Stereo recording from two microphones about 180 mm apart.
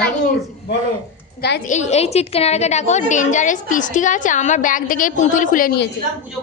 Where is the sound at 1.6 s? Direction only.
40° left (ahead or behind).